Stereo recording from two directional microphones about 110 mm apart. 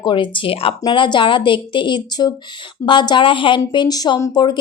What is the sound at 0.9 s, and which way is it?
A woman's voice, 45° left (ahead or behind).